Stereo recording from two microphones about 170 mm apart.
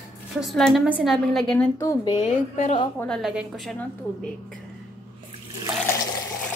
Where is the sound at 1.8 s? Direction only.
20° left (ahead or behind).